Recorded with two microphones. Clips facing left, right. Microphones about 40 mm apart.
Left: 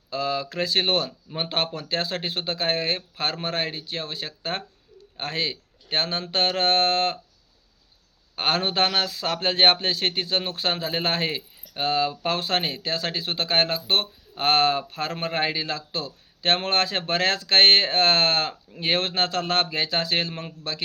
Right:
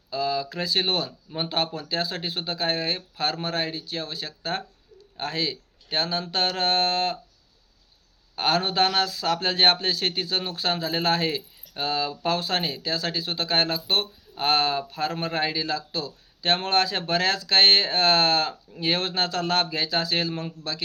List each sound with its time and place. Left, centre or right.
0.1 s speech: left
8.4 s speech: left